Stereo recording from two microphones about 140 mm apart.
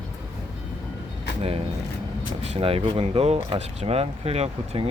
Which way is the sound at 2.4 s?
45° right (ahead or behind).